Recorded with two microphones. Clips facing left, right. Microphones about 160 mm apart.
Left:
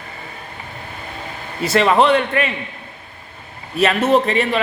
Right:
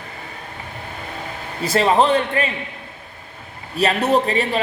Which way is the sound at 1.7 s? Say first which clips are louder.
Left 2 dB; 35° right (ahead or behind).